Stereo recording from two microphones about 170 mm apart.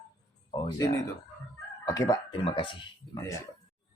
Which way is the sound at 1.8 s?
20° left (ahead or behind).